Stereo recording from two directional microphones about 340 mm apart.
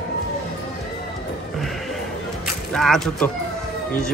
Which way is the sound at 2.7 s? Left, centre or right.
Centre.